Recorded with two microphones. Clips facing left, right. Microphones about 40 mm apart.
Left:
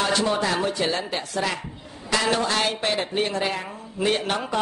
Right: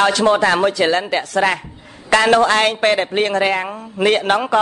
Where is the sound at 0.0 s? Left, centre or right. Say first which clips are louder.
Right 9 dB; right.